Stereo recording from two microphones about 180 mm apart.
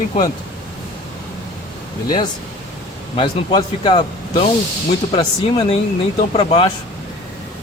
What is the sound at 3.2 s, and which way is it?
A man's voice, 30° left (ahead or behind).